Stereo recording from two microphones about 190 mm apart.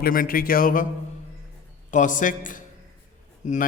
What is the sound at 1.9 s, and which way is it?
A man's voice, 40° left (ahead or behind).